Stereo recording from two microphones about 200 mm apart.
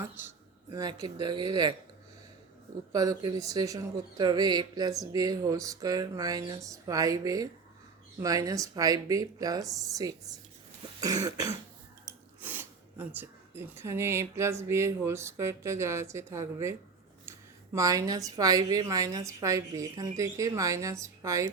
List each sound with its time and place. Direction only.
0.7 s speech: 20° right (ahead or behind)
2.9 s speech: 20° right (ahead or behind)
17.7 s speech: 15° right (ahead or behind)